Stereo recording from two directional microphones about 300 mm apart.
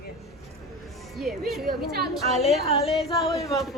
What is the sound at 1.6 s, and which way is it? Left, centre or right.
Speech, right.